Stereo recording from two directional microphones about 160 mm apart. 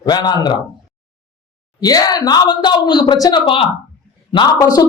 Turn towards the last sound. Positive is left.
turn(degrees=20)  # may be behind; listen again after turning